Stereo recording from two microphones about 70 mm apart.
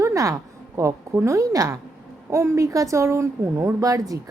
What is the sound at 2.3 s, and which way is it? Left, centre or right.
Speech, right.